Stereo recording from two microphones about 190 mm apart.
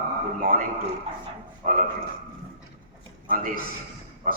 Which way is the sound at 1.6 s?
45° right (ahead or behind).